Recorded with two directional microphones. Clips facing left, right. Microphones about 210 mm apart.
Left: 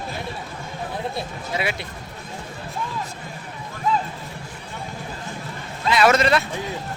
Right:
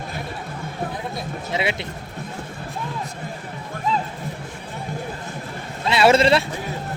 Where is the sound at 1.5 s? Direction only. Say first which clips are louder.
Right 2 dB; 25° right (ahead or behind).